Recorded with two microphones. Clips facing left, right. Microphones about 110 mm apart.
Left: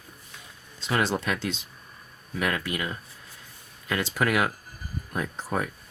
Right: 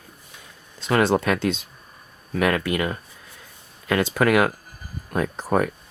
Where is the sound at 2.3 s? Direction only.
70° right (ahead or behind).